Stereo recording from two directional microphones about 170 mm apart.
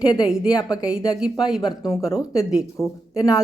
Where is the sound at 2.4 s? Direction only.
5° right (ahead or behind).